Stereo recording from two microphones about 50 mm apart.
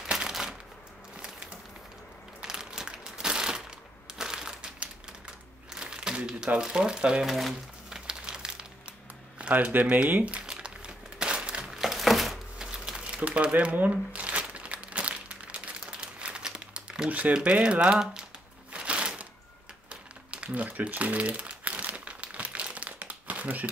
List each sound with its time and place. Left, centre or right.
0.0 s shuffling cards: centre
2.4 s crumpling: centre
7.3 s speech: centre
8.1 s crumpling: centre
9.4 s speech: right
10.4 s a sound: centre
11.7 s a sound: centre
12.5 s crumpling: centre
17.3 s speech: right
18.7 s a sound: right
20.4 s crumpling: right